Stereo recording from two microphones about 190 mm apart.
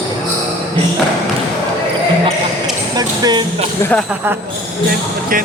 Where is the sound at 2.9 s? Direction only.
20° right (ahead or behind).